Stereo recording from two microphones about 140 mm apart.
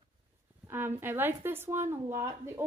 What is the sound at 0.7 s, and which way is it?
A woman's voice, 15° right (ahead or behind).